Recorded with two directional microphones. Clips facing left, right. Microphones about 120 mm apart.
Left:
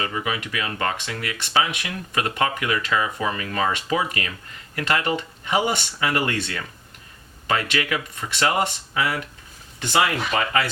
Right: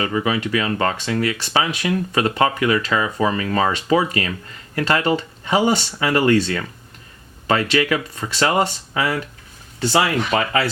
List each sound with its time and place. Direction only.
0.3 s speech: 30° right (ahead or behind)